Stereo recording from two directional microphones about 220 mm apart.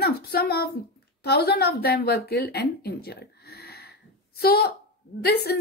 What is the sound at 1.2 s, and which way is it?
A woman's voice, 45° left (ahead or behind).